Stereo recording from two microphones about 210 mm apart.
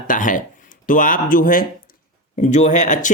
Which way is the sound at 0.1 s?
40° left (ahead or behind).